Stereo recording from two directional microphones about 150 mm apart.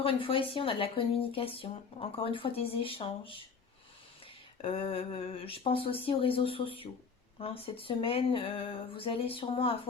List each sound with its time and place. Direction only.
0.0 s speech: 35° left (ahead or behind)
4.6 s speech: 40° left (ahead or behind)